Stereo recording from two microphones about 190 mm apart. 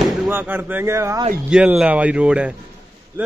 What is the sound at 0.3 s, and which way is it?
Speech, 10° right (ahead or behind).